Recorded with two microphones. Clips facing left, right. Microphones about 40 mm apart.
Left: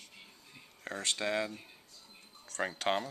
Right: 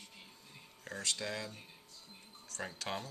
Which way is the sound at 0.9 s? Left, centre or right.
Left.